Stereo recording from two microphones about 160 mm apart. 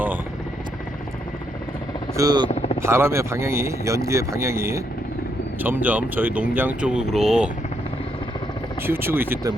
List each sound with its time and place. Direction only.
2.1 s speech: 25° right (ahead or behind)
2.5 s a sound: 40° left (ahead or behind)
2.8 s speech: 15° right (ahead or behind)
8.9 s speech: 15° right (ahead or behind)